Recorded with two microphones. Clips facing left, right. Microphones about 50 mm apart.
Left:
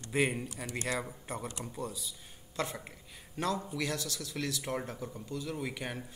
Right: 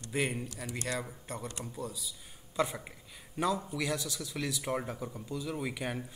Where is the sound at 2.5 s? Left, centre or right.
Centre.